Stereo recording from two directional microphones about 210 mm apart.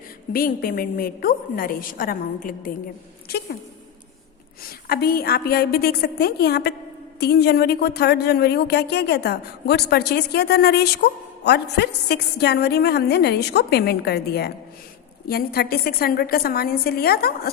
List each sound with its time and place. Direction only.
0.3 s speech: 45° left (ahead or behind)
4.6 s speech: 45° left (ahead or behind)